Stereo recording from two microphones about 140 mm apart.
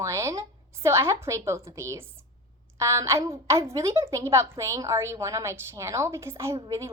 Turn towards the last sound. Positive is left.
turn(degrees=-20)  # may be behind; listen again after turning